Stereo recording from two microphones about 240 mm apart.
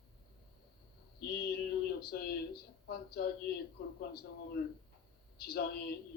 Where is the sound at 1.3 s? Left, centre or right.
Left.